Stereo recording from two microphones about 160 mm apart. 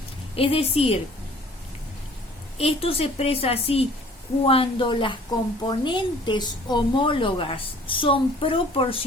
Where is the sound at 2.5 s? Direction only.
40° left (ahead or behind).